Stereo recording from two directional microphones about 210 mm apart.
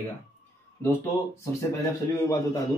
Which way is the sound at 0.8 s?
10° left (ahead or behind).